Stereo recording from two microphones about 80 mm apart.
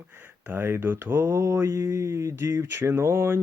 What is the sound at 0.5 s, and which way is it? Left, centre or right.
Mantra, right.